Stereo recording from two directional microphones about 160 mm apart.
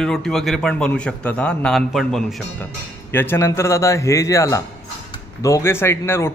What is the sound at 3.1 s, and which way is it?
Speech, 15° left (ahead or behind).